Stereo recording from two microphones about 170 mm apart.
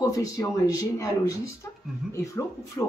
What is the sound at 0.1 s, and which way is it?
Speech, 20° left (ahead or behind).